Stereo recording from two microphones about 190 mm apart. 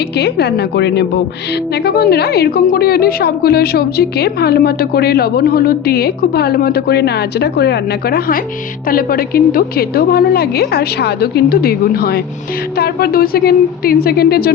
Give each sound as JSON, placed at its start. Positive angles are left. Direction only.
{"t": 0.2, "sound": "a woman's voice", "side_deg": 60}